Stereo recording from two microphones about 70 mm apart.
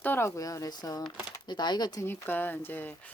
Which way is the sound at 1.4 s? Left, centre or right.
Left.